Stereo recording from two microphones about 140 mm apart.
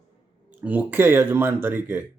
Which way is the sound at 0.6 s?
10° right (ahead or behind).